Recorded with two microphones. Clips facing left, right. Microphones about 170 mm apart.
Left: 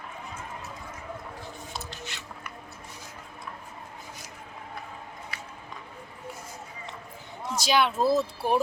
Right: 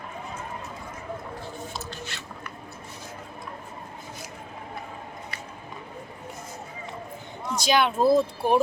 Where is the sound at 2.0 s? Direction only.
15° left (ahead or behind).